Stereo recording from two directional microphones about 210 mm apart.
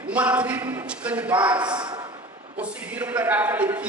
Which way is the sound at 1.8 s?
20° right (ahead or behind).